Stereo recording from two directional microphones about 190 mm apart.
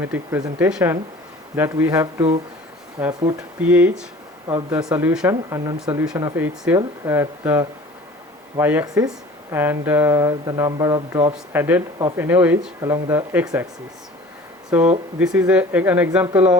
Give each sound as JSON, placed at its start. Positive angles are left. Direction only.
{"t": 0.0, "sound": "speech", "side_deg": -10}
{"t": 14.7, "sound": "speech", "side_deg": -10}